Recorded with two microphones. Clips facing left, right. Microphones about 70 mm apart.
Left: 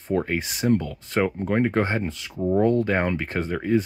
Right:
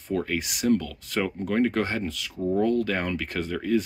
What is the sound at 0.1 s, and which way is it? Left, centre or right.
Speech, left.